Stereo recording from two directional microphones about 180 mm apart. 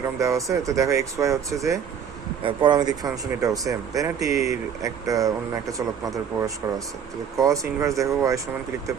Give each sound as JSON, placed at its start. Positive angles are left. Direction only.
{"t": 0.2, "sound": "speech", "side_deg": -20}
{"t": 2.4, "sound": "speech", "side_deg": -30}